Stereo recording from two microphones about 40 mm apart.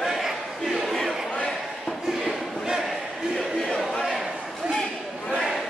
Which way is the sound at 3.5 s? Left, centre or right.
Centre.